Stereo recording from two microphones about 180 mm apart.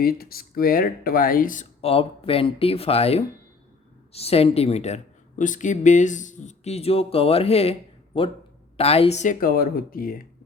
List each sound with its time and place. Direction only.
0.0 s speech: 55° left (ahead or behind)
1.8 s speech: 30° left (ahead or behind); by 10.2 s 55° left (ahead or behind)